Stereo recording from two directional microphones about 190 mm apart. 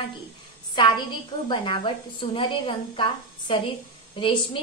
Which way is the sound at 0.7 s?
25° left (ahead or behind).